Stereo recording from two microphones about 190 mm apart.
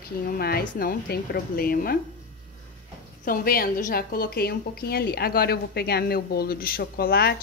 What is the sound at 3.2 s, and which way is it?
A woman's voice, 50° left (ahead or behind).